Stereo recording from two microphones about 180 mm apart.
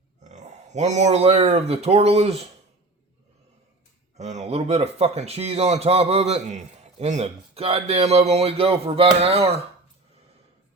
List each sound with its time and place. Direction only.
0.3 s speech: 40° right (ahead or behind)
4.2 s speech: 40° right (ahead or behind)